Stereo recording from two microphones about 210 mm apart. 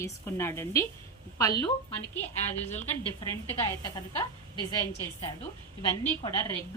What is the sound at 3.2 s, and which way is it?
Speech, 15° left (ahead or behind).